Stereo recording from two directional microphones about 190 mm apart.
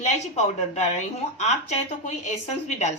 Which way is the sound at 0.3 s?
35° left (ahead or behind).